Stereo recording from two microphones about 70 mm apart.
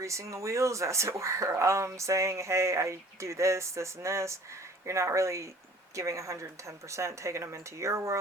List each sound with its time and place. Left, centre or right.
0.0 s speech: right